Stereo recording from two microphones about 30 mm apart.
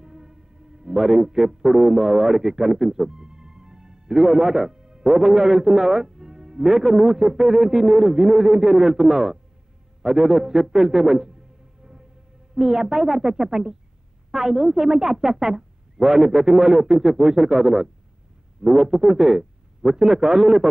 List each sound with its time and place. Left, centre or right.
0.0 s a man's voice: right